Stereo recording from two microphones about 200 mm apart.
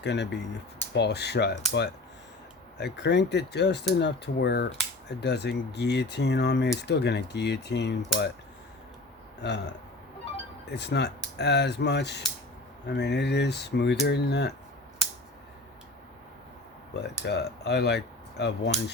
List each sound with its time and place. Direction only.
0.0 s speech: 60° left (ahead or behind)
2.7 s speech: 60° left (ahead or behind)
9.4 s speech: 60° left (ahead or behind)
10.7 s speech: 60° left (ahead or behind)
16.9 s speech: 55° left (ahead or behind)